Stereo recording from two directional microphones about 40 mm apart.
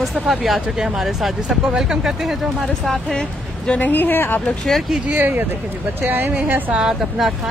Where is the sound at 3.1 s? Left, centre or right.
Left.